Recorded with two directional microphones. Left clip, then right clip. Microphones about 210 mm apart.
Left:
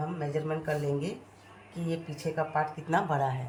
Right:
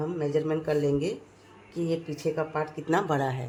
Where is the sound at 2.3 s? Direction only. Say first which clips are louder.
Left 4 dB; 40° right (ahead or behind).